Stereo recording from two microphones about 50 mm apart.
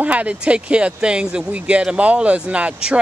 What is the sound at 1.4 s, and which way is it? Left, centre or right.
Speech, right.